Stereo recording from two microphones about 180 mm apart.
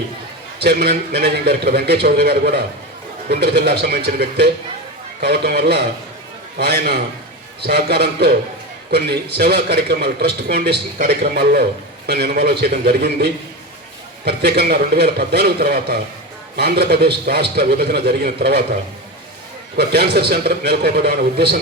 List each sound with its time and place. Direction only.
0.6 s a man's voice: 65° right (ahead or behind)
19.7 s a man's voice: 65° right (ahead or behind)